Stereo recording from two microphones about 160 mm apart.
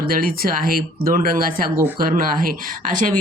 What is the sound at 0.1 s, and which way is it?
Speech, 65° right (ahead or behind).